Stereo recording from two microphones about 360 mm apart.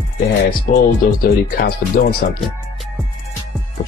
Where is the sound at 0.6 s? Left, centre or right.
Left.